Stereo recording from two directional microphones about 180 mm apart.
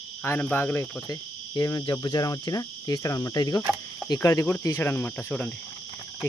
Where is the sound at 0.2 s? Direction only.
10° left (ahead or behind).